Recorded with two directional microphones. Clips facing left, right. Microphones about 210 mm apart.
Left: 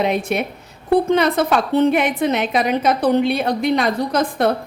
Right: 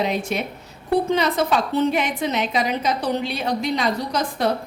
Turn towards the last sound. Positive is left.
turn(degrees=55)  # may be behind; listen again after turning